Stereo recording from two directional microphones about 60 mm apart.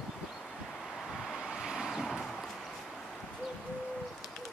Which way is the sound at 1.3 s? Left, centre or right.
Centre.